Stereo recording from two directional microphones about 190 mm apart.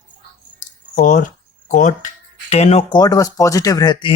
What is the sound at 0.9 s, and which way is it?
Speech, 45° left (ahead or behind).